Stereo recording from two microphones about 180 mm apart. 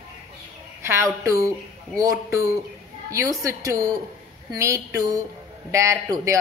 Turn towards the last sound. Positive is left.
turn(degrees=-20)  # may be behind; listen again after turning